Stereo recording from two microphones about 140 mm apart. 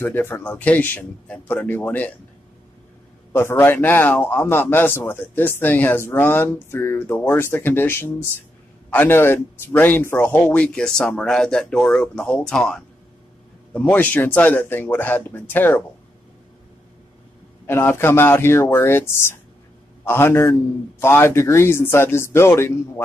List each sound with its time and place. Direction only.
0.0 s a man's voice: 15° left (ahead or behind)
3.3 s a man's voice: 15° left (ahead or behind)
17.6 s a man's voice: 15° left (ahead or behind)